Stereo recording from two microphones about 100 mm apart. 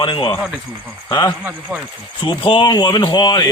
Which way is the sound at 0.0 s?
50° left (ahead or behind).